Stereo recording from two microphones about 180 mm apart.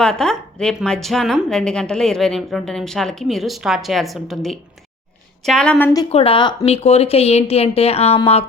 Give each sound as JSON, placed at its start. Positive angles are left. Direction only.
{"t": 0.0, "sound": "a woman's voice", "side_deg": 5}
{"t": 6.1, "sound": "speech", "side_deg": 30}